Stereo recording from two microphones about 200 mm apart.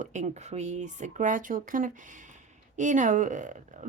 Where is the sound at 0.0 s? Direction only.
35° right (ahead or behind).